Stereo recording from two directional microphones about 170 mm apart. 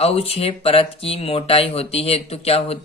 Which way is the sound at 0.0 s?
35° left (ahead or behind).